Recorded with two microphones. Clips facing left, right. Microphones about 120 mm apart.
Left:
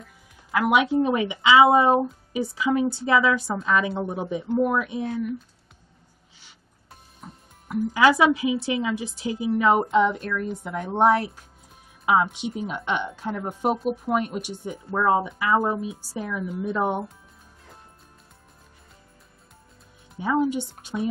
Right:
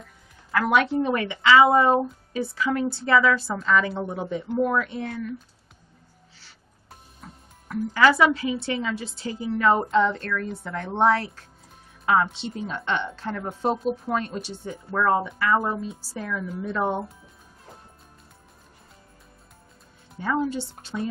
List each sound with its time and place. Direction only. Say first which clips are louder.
0.5 s speech: left 1 dB; 15° left (ahead or behind)
7.2 s speech: left 3 dB; 15° left (ahead or behind)
20.2 s speech: left 3 dB; 15° left (ahead or behind)